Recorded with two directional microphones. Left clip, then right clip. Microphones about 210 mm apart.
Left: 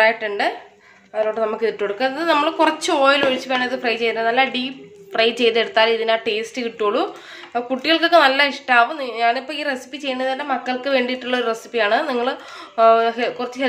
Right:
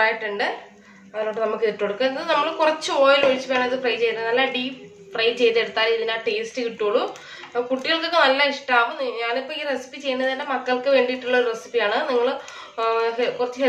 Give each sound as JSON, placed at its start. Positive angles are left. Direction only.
{"t": 0.0, "sound": "a woman's voice", "side_deg": 50}